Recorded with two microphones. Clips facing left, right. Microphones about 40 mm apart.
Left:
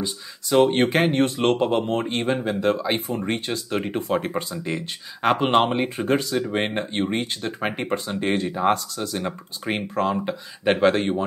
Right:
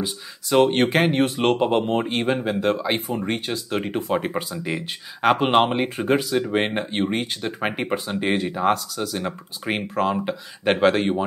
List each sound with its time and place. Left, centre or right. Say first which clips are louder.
0.0 s speech: right 1 dB; centre